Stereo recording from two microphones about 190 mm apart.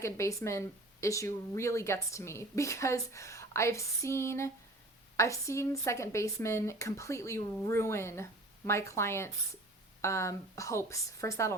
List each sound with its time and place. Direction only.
0.0 s speech: 15° left (ahead or behind)